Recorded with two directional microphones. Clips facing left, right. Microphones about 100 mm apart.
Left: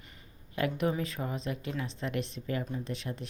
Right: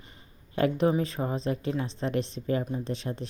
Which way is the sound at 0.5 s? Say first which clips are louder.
Right 6 dB; 30° right (ahead or behind).